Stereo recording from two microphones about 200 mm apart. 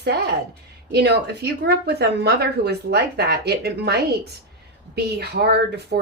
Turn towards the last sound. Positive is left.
turn(degrees=-55)  # may be behind; listen again after turning